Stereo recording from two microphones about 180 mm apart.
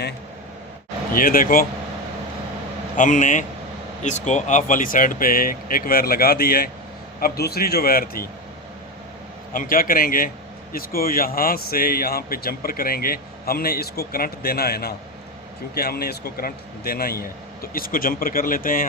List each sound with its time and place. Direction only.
1.1 s a man's voice: 50° left (ahead or behind)
3.0 s a man's voice: 45° left (ahead or behind)
9.5 s a man's voice: 50° left (ahead or behind)